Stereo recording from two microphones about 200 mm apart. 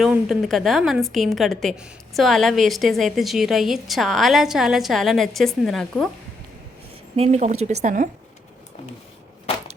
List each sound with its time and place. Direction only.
0.0 s a woman's voice: centre (ahead or behind)
7.2 s speech: 35° right (ahead or behind)
9.5 s crushing: 30° left (ahead or behind)